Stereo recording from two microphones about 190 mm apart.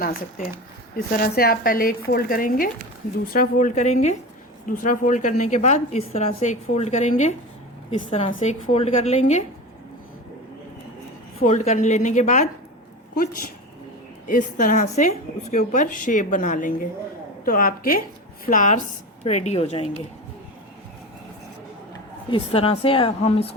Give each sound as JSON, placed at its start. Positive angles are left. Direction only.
{"t": 0.0, "sound": "a woman's voice", "side_deg": 50}
{"t": 11.3, "sound": "a woman's voice", "side_deg": 40}
{"t": 14.3, "sound": "a woman's voice", "side_deg": 45}
{"t": 22.3, "sound": "a woman's voice", "side_deg": 30}